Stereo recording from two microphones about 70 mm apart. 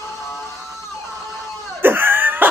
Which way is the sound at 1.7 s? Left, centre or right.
Right.